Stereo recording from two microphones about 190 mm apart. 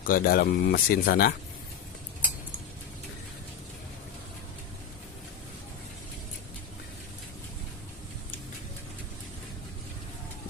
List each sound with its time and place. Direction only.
0.0 s speech: 50° left (ahead or behind)